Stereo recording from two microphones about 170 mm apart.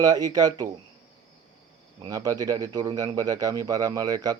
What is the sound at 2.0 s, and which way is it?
Speech, 20° right (ahead or behind).